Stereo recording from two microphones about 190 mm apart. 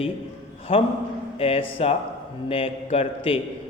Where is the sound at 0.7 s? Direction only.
30° left (ahead or behind).